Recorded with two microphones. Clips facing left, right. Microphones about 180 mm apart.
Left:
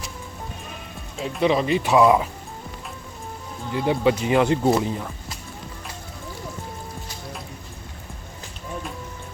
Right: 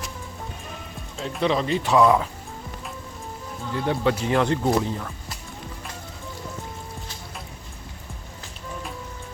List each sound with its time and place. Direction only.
1.2 s speech: 10° left (ahead or behind)
3.8 s speech: 10° left (ahead or behind)